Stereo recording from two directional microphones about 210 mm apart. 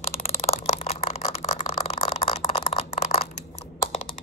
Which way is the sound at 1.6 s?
25° left (ahead or behind).